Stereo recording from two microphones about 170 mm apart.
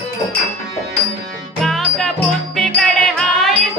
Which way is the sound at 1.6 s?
Centre (ahead or behind).